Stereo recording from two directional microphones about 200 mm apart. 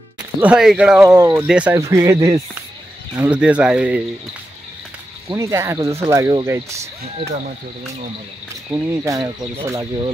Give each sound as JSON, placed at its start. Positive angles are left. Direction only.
{"t": 0.4, "sound": "speech", "side_deg": -5}
{"t": 1.0, "sound": "speech", "side_deg": -15}
{"t": 5.3, "sound": "speech", "side_deg": -15}
{"t": 8.6, "sound": "speech", "side_deg": -15}